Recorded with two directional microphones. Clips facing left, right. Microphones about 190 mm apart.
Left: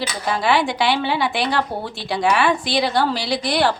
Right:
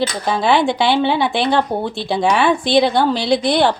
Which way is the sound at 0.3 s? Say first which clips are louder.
Right 4 dB; 25° right (ahead or behind).